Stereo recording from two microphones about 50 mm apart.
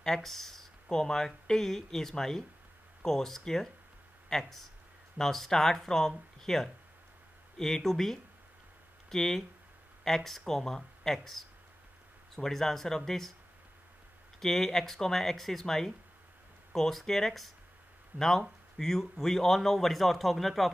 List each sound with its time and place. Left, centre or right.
0.0 s a man's voice: centre
14.4 s a man's voice: centre
18.1 s speech: right
18.8 s a man's voice: centre